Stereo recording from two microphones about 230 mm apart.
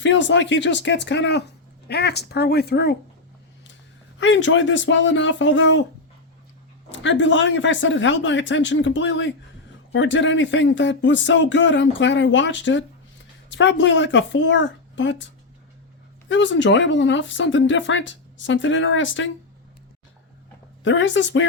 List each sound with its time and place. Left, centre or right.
0.0 s speech: left
4.2 s speech: left
7.0 s speech: left
16.3 s speech: left
20.8 s speech: left